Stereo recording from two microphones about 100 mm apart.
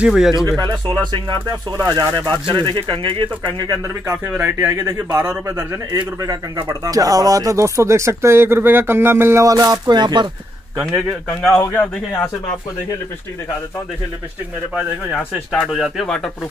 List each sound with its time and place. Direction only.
0.0 s speech: 5° right (ahead or behind)
0.5 s speech: 40° right (ahead or behind); by 3.3 s 55° right (ahead or behind)
3.5 s speech: 40° right (ahead or behind)
4.3 s speech: 20° right (ahead or behind)
5.9 s speech: 45° right (ahead or behind)
11.5 s speech: 20° left (ahead or behind)
15.7 s speech: centre (ahead or behind)